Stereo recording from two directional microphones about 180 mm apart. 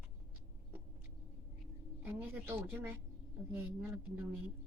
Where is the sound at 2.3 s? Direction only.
15° right (ahead or behind).